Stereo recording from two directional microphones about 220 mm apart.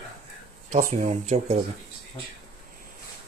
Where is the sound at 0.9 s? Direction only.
30° right (ahead or behind).